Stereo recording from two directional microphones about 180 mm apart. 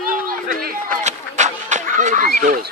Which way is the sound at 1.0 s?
40° right (ahead or behind).